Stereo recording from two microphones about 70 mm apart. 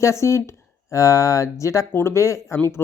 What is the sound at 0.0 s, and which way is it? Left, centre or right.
Speech, left.